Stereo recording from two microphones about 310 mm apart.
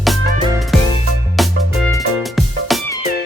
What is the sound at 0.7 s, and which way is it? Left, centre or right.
Music, centre.